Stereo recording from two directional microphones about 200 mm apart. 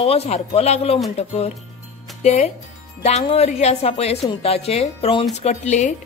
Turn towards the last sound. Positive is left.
turn(degrees=35)  # may be behind; listen again after turning